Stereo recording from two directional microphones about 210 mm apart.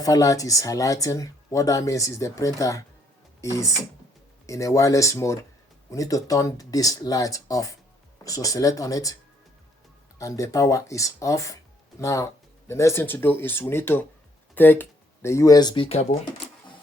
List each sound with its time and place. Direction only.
0.0 s speech: 15° left (ahead or behind)
10.2 s speech: 15° left (ahead or behind)